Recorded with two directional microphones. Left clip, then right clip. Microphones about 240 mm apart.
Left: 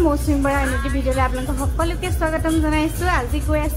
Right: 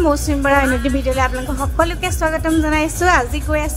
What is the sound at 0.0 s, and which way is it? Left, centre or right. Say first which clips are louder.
A woman's voice: right 3 dB; right.